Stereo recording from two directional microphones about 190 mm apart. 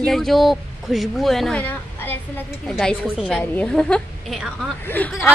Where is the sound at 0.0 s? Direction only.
Centre (ahead or behind).